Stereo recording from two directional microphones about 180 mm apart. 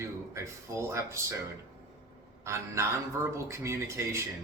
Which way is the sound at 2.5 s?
15° right (ahead or behind).